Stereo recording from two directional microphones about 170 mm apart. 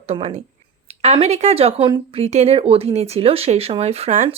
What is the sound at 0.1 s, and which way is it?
Speech, 35° right (ahead or behind).